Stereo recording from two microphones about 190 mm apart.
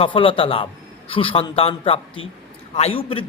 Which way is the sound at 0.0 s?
30° left (ahead or behind).